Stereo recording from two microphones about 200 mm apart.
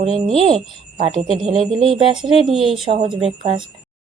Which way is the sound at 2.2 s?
Centre (ahead or behind).